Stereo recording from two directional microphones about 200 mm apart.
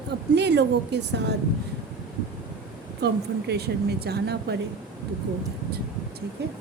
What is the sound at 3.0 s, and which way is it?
Speech, 55° right (ahead or behind).